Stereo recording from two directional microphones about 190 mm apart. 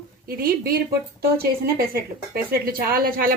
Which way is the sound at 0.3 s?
50° right (ahead or behind).